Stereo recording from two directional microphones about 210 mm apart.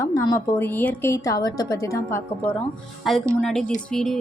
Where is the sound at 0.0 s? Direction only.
15° left (ahead or behind).